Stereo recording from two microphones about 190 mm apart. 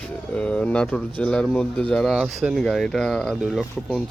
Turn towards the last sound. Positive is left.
turn(degrees=0)  # may be behind; listen again after turning